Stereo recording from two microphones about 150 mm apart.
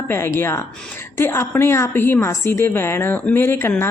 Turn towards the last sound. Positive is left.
turn(degrees=15)  # may be behind; listen again after turning